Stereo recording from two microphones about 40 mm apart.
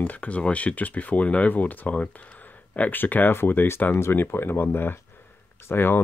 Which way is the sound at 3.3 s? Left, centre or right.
Left.